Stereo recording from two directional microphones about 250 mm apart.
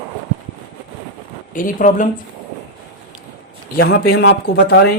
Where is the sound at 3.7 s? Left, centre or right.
Left.